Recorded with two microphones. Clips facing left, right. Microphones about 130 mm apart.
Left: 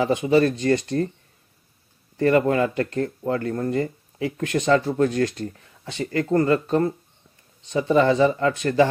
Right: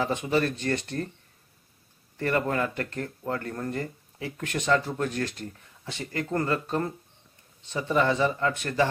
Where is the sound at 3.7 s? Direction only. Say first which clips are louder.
Left 8 dB; 60° left (ahead or behind); by 8.9 s 40° left (ahead or behind).